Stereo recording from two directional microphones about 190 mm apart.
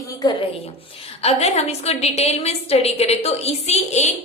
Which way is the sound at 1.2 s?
35° left (ahead or behind).